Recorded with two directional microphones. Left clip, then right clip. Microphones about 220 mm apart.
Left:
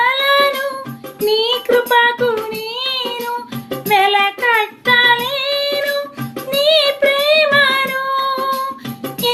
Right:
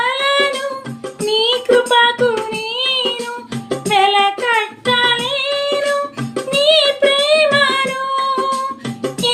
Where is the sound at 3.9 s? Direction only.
15° left (ahead or behind).